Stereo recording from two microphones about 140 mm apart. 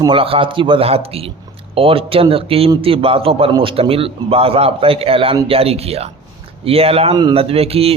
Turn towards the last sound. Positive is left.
turn(degrees=-45)  # may be behind; listen again after turning